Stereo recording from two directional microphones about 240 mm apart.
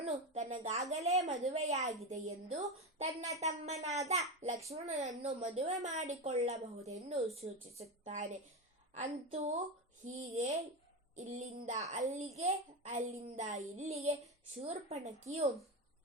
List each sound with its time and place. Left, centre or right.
0.0 s a woman's voice: right
9.0 s a woman's voice: right